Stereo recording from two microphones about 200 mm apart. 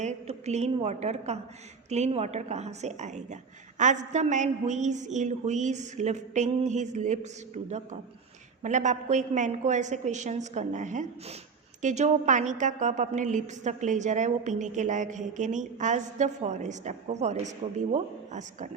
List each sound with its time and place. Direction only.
0.0 s a woman's voice: 35° right (ahead or behind)